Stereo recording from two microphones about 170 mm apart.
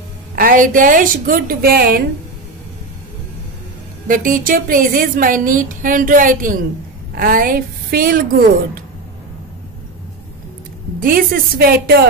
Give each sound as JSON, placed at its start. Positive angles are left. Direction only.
{"t": 0.4, "sound": "a woman's voice", "side_deg": -55}
{"t": 4.1, "sound": "a woman's voice", "side_deg": -55}
{"t": 11.0, "sound": "a woman's voice", "side_deg": -55}